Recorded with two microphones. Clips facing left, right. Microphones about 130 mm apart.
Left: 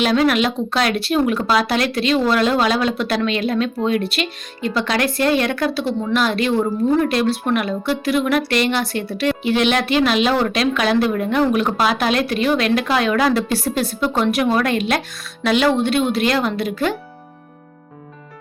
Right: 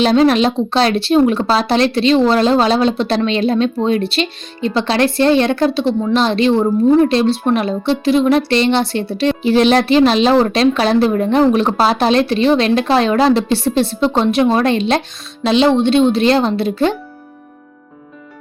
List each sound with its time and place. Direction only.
0.0 s speech: 30° right (ahead or behind)